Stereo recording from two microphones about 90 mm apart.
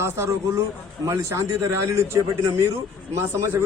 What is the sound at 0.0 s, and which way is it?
A man's voice, 35° right (ahead or behind).